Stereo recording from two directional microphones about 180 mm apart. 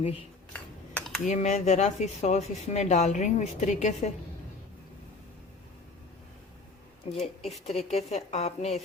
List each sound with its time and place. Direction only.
0.5 s a sound: 5° left (ahead or behind)
1.2 s speech: 40° left (ahead or behind)
7.2 s speech: 35° left (ahead or behind)